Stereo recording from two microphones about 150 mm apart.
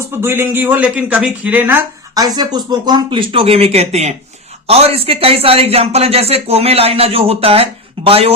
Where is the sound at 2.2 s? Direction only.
25° right (ahead or behind).